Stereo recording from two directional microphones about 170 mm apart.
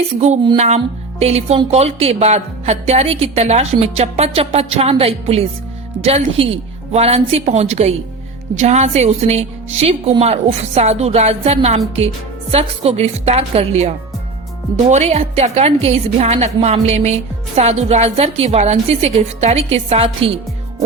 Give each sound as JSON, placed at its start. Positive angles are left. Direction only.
{"t": 0.5, "sound": "a woman's voice", "side_deg": -40}